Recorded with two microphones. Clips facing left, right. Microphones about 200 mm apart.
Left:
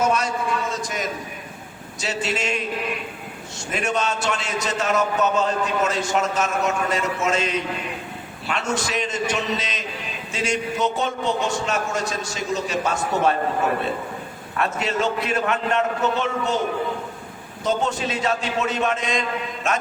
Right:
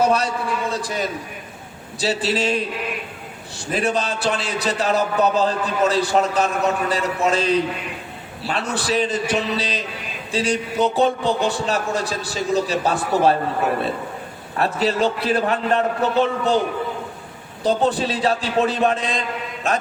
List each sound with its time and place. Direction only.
0.0 s a man's voice: 35° right (ahead or behind)
3.7 s a man's voice: 35° right (ahead or behind)
14.5 s a man's voice: 35° right (ahead or behind)
17.6 s a man's voice: 35° right (ahead or behind)